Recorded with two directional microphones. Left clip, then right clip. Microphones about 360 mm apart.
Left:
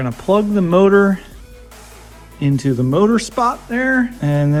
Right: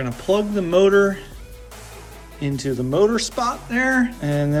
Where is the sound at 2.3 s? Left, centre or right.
Centre.